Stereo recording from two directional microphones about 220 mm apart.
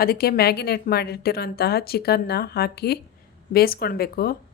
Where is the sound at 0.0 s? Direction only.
45° left (ahead or behind).